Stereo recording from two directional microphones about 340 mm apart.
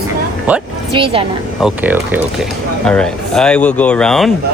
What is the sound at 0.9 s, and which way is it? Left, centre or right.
Speech, centre.